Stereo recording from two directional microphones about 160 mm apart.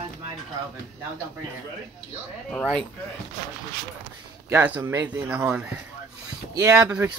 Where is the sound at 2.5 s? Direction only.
5° left (ahead or behind).